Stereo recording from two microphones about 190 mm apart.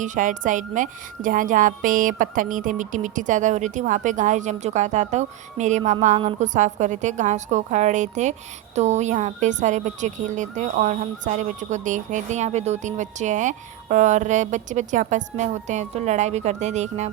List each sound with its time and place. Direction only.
0.0 s a woman's voice: 40° right (ahead or behind)